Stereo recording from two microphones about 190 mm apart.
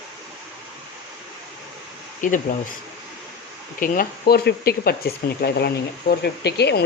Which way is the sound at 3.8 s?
50° left (ahead or behind).